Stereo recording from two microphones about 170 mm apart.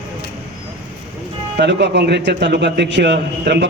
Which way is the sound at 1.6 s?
80° right.